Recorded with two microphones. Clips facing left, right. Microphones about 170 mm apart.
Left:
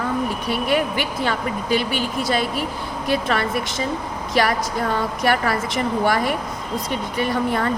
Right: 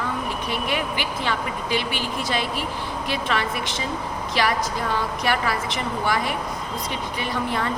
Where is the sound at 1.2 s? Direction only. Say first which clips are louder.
Left 4 dB; 45° left (ahead or behind).